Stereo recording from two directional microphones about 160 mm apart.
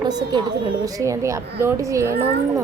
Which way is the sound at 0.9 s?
20° right (ahead or behind).